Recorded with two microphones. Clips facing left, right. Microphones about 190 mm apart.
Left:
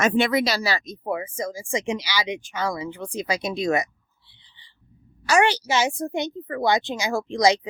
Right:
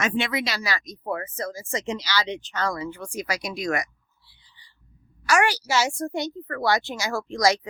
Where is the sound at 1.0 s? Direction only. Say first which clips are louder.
Left 1 dB; 10° left (ahead or behind).